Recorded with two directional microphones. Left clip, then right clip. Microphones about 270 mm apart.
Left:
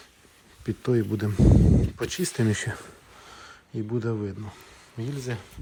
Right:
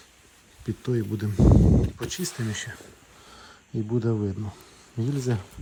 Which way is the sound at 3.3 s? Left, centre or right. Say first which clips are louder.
Even; centre.